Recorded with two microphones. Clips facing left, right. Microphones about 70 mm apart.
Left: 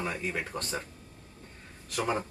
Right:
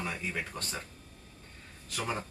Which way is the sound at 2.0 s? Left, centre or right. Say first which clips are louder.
Left 5 dB; centre.